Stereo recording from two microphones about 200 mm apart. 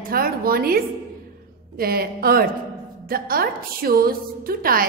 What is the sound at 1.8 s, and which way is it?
A woman's voice, 50° right (ahead or behind).